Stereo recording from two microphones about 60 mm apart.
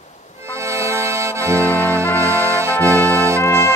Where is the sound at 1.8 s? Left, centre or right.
Left.